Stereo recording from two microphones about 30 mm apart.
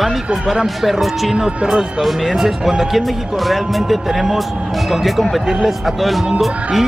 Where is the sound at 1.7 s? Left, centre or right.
Centre.